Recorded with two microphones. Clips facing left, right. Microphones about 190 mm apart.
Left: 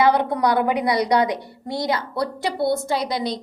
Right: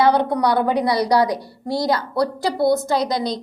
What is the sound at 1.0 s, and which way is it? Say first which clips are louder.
A woman's voice: right 2 dB; 35° right (ahead or behind).